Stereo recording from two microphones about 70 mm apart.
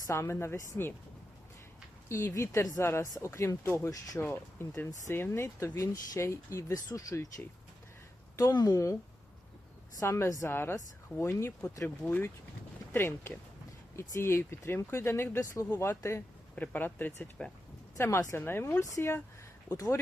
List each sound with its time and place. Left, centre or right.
0.1 s speech: left
2.0 s speech: left
8.5 s speech: left
10.0 s speech: left
10.5 s speech: left
15.4 s speech: left
16.6 s speech: left
17.4 s speech: centre
17.9 s speech: left
18.8 s speech: left